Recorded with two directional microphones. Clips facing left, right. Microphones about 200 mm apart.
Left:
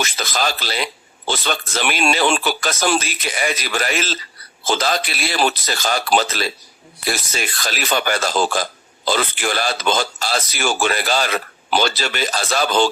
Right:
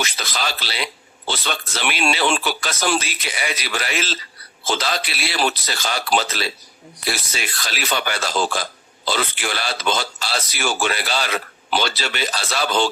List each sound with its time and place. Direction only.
0.0 s speech: 45° left (ahead or behind)